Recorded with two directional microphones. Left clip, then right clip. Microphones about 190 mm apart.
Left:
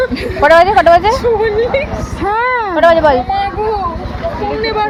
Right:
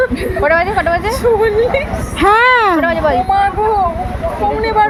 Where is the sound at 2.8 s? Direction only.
45° left (ahead or behind).